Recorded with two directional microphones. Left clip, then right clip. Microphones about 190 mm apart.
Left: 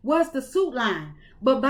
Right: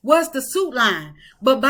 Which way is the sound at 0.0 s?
10° right (ahead or behind).